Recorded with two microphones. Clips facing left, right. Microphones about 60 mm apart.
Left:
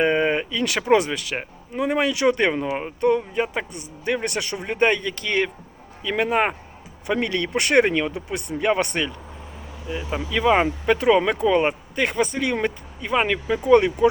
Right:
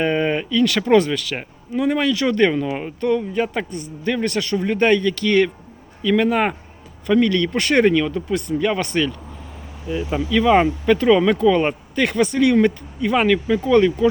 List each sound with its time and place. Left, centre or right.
0.0 s speech: centre
1.4 s speech: centre
2.0 s speech: left
3.0 s speech: left
3.3 s a man's voice: centre
10.2 s a man's voice: centre